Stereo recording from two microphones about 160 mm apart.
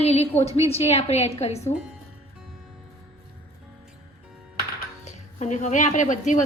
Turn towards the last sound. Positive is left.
turn(degrees=50)  # may be behind; listen again after turning